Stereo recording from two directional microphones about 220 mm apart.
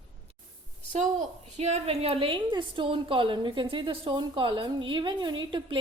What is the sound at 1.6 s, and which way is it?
A woman's voice, 30° right (ahead or behind).